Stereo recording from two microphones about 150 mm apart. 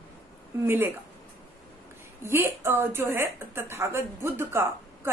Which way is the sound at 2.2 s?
15° right (ahead or behind).